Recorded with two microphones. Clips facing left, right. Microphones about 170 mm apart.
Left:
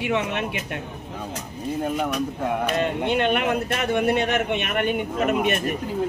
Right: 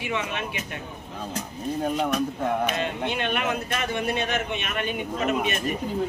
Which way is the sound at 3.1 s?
55° left (ahead or behind).